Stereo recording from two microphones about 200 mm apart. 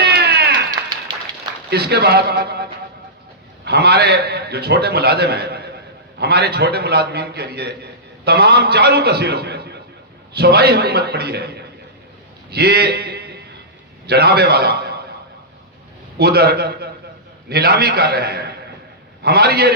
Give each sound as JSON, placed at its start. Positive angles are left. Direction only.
{"t": 0.0, "sound": "a sound", "side_deg": -55}
{"t": 1.7, "sound": "a man's voice", "side_deg": -55}
{"t": 16.1, "sound": "a man's voice", "side_deg": -50}